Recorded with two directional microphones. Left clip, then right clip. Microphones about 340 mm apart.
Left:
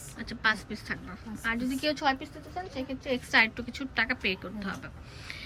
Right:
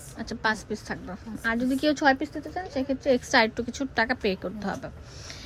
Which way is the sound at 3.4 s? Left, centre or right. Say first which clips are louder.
Right 2 dB; centre.